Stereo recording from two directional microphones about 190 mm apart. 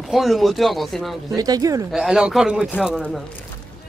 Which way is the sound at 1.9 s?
Centre (ahead or behind).